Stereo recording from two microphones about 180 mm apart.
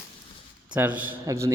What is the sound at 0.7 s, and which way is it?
Speech, 10° right (ahead or behind).